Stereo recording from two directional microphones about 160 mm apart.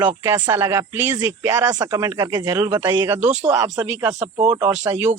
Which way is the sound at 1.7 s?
25° right (ahead or behind).